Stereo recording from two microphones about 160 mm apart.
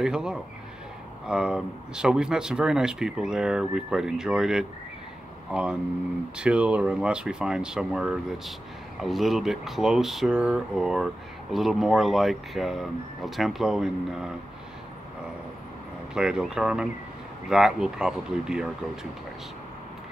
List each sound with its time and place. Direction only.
0.0 s speech: 5° right (ahead or behind)
16.2 s speech: 5° right (ahead or behind)